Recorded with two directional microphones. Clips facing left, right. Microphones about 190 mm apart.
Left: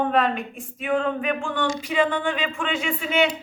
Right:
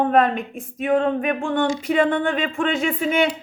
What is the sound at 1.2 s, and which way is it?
Speech, 55° right (ahead or behind).